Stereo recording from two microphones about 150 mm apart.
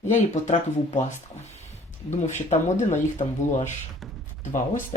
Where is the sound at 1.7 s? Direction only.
50° left (ahead or behind).